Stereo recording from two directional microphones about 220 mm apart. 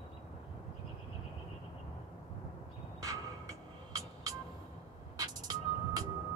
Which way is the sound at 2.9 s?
15° right (ahead or behind).